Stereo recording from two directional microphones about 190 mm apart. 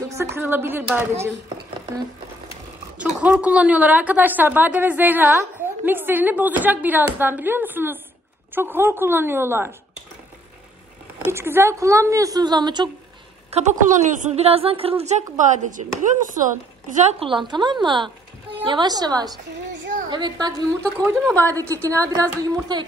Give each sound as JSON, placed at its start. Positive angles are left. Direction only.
{"t": 0.1, "sound": "a woman's voice", "side_deg": -15}
{"t": 3.2, "sound": "a woman's voice", "side_deg": -5}
{"t": 11.3, "sound": "a woman's voice", "side_deg": -10}
{"t": 14.1, "sound": "speech", "side_deg": -35}
{"t": 17.0, "sound": "a woman's voice", "side_deg": -35}
{"t": 20.8, "sound": "speech", "side_deg": 5}
{"t": 21.5, "sound": "a woman's voice", "side_deg": -15}